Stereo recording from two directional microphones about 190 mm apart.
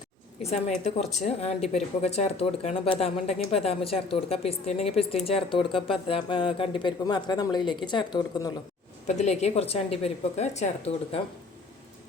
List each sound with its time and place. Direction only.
0.4 s a woman's voice: 35° left (ahead or behind)
9.0 s a woman's voice: 35° left (ahead or behind)